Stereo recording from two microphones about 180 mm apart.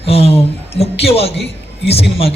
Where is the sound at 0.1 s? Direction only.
35° left (ahead or behind).